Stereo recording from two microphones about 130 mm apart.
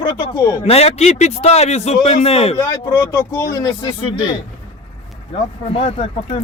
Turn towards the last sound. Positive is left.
turn(degrees=50)  # may be behind; listen again after turning